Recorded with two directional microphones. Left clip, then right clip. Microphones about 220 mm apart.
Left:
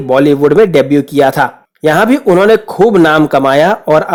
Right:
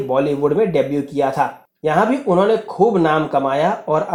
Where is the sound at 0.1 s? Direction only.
45° left (ahead or behind).